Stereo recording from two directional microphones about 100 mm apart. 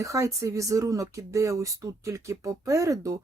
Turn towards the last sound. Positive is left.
turn(degrees=-35)  # may be behind; listen again after turning